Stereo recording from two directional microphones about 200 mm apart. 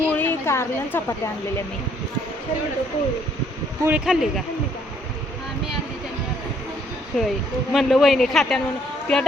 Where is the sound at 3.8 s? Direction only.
5° right (ahead or behind).